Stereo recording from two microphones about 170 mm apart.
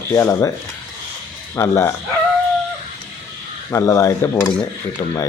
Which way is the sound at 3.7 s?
15° left (ahead or behind).